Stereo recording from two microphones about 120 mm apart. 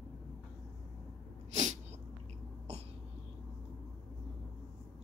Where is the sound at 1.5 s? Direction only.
80° right.